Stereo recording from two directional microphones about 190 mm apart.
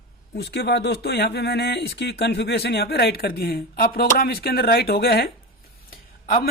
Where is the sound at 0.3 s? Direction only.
60° left (ahead or behind).